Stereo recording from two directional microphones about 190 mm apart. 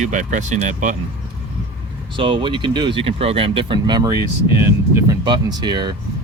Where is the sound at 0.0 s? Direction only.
40° right (ahead or behind).